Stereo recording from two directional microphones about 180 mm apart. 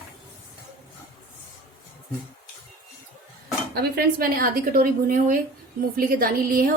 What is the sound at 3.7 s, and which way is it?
A woman's voice, 60° right (ahead or behind).